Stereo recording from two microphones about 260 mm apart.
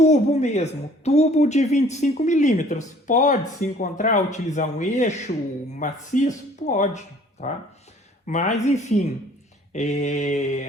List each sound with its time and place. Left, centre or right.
0.0 s speech: left
8.3 s speech: left